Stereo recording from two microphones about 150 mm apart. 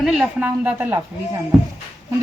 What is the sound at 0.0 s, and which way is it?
Speech, 5° right (ahead or behind).